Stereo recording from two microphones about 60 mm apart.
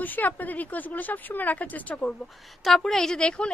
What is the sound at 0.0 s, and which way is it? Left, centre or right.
A woman's voice, left.